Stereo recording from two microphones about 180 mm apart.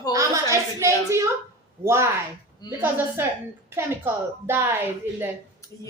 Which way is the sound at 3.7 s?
15° right (ahead or behind).